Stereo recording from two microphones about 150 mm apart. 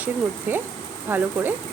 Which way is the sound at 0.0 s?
15° right (ahead or behind).